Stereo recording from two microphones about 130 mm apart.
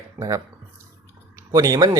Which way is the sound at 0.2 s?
25° right (ahead or behind).